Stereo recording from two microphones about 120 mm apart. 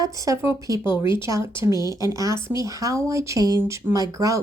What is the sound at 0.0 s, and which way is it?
Speech, 25° right (ahead or behind).